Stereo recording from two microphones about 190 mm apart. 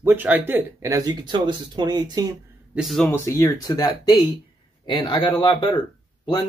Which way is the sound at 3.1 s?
15° left (ahead or behind).